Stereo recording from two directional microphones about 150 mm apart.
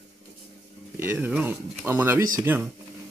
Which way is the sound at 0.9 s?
15° right (ahead or behind).